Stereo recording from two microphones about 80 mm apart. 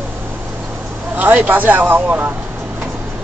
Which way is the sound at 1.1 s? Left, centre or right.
Centre.